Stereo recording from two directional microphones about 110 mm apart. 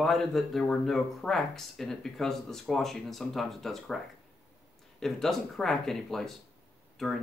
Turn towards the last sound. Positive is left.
turn(degrees=5)  # may be behind; listen again after turning